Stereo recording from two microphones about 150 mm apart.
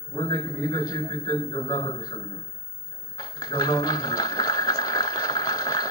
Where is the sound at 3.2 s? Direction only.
25° left (ahead or behind).